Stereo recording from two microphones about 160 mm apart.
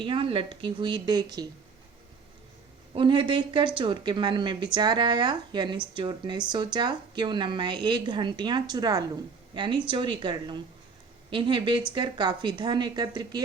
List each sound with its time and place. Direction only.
0.0 s a woman's voice: 35° right (ahead or behind)
2.9 s a woman's voice: 30° right (ahead or behind)